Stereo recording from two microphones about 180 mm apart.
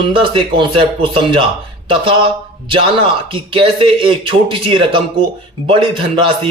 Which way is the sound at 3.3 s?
30° right (ahead or behind).